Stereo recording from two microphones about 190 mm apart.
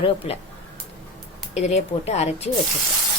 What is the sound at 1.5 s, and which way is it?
Speech, 35° left (ahead or behind).